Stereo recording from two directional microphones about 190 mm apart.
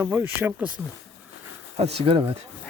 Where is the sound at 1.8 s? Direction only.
30° right (ahead or behind).